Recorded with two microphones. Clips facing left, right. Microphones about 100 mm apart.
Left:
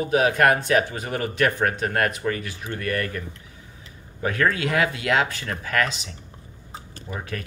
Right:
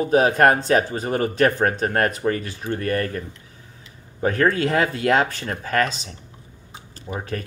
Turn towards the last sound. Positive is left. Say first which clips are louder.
# right 3 dB
turn(degrees=-35)  # may be behind; listen again after turning